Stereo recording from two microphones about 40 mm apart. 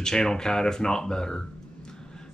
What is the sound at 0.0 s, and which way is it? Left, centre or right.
Speech, centre.